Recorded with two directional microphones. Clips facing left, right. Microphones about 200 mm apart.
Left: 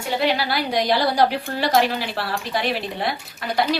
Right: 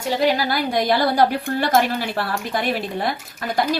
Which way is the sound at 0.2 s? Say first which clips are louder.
Right 2 dB; 45° right (ahead or behind).